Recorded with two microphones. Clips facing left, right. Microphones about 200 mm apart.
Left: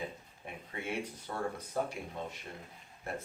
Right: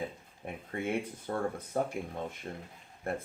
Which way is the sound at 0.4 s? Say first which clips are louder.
Right 6 dB; 50° right (ahead or behind).